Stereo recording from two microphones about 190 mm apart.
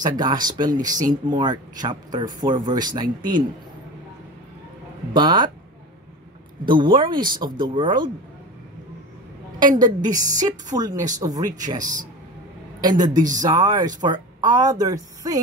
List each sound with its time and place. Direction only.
0.0 s speech: 20° right (ahead or behind)
5.1 s speech: 25° right (ahead or behind)
6.6 s speech: 25° right (ahead or behind)
9.8 s speech: 20° right (ahead or behind)